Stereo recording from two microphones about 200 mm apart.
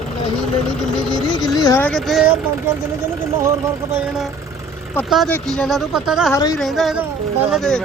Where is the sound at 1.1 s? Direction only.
20° left (ahead or behind).